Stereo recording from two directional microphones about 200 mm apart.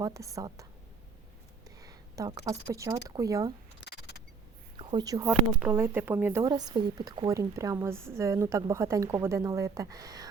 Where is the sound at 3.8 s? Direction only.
55° left (ahead or behind).